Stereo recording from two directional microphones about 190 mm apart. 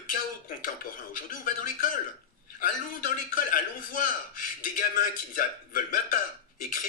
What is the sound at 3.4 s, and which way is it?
Speech, 45° left (ahead or behind).